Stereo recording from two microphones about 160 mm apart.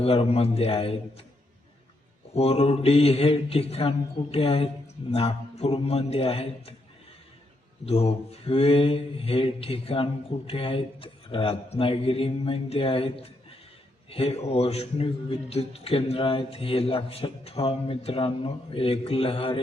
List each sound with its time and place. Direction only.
0.0 s mantra: 40° left (ahead or behind)
2.3 s mantra: 40° left (ahead or behind)
7.9 s mantra: 40° left (ahead or behind)